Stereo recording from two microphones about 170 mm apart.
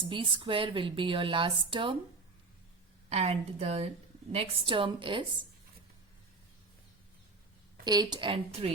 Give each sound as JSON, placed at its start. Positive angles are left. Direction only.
{"t": 0.1, "sound": "speech", "side_deg": -30}
{"t": 3.1, "sound": "speech", "side_deg": -40}
{"t": 7.9, "sound": "a woman's voice", "side_deg": -25}